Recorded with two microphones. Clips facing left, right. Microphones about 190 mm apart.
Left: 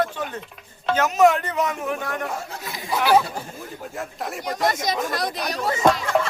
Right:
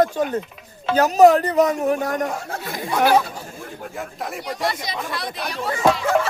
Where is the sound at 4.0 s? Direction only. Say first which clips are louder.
Even; centre (ahead or behind).